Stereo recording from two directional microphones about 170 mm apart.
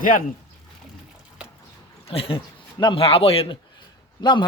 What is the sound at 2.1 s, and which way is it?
Speech, 30° left (ahead or behind).